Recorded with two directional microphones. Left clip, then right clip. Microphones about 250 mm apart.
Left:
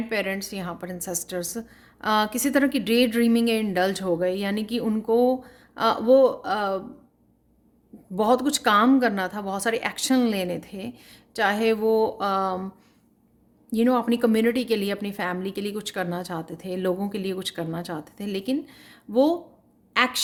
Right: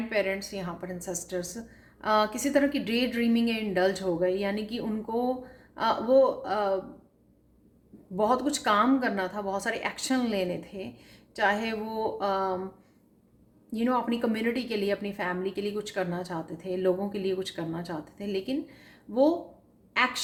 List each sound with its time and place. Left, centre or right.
0.1 s a woman's voice: left
8.1 s a woman's voice: left
13.7 s a woman's voice: left